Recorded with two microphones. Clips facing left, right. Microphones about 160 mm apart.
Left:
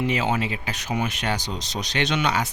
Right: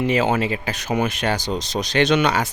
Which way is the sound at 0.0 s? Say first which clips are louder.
Right 5 dB; 50° right (ahead or behind).